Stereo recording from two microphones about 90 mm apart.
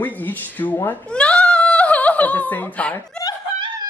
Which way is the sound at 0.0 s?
20° left (ahead or behind).